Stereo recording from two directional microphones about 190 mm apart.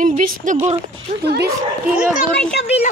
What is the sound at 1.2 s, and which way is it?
Speech, 60° right (ahead or behind).